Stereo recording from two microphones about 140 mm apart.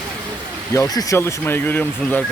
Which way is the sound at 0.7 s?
20° left (ahead or behind).